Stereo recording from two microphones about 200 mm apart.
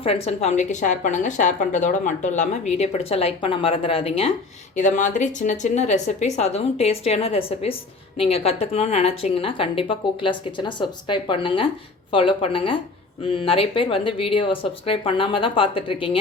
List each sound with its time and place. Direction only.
0.0 s a woman's voice: 30° left (ahead or behind)
4.8 s a woman's voice: 40° left (ahead or behind)